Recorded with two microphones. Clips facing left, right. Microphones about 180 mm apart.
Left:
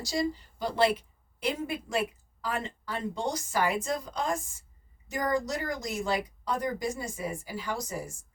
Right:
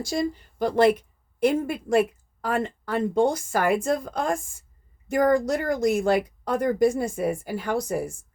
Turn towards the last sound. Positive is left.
turn(degrees=-55)  # may be behind; listen again after turning